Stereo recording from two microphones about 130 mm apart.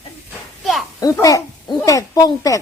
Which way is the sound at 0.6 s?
Centre (ahead or behind).